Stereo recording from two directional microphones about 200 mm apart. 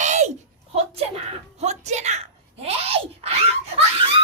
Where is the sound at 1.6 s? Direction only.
35° right (ahead or behind).